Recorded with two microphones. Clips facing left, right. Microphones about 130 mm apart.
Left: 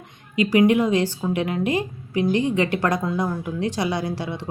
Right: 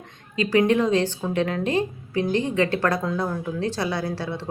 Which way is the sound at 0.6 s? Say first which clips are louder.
Left 2 dB; 10° left (ahead or behind).